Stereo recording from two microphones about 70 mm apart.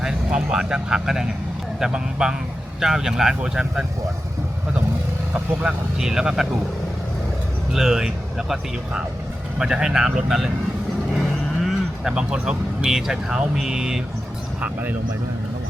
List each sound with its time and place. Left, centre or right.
0.0 s speech: centre
5.3 s speech: centre
7.7 s speech: centre
12.0 s speech: centre
14.6 s speech: right